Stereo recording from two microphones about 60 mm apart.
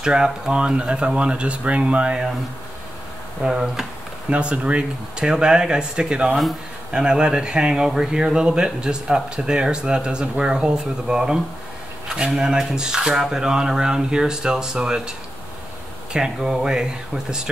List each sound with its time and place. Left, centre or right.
0.0 s speech: centre
3.4 s speech: centre
4.3 s speech: centre